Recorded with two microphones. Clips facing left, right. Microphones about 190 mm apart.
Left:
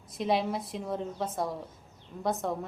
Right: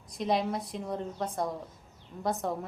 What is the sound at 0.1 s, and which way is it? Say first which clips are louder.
A woman's voice: left 1 dB; centre (ahead or behind).